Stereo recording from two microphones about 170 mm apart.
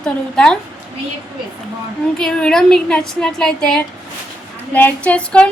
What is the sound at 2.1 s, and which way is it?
A woman's voice, 5° left (ahead or behind).